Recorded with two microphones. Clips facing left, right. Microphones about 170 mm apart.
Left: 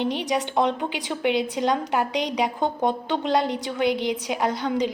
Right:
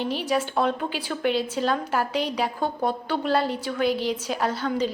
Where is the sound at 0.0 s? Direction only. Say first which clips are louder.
Left 1 dB; 20° left (ahead or behind).